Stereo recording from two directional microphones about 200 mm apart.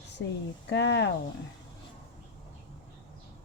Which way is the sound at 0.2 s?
65° left (ahead or behind).